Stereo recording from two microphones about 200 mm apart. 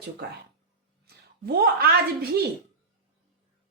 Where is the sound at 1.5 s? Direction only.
50° right (ahead or behind).